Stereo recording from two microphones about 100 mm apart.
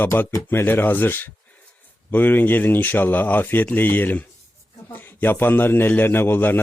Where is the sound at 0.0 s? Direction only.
20° left (ahead or behind).